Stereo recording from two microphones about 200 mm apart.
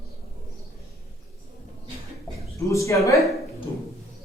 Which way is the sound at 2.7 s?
15° left (ahead or behind).